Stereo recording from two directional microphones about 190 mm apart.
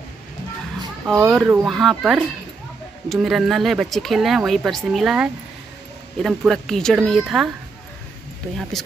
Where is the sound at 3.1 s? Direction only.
Centre (ahead or behind).